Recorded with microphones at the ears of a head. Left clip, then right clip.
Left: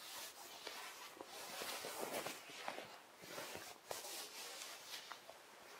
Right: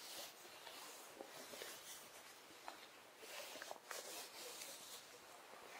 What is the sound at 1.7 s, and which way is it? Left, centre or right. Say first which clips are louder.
Walk: left 10 dB; left.